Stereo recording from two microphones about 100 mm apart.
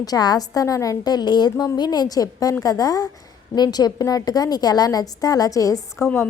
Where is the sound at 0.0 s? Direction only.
40° left (ahead or behind).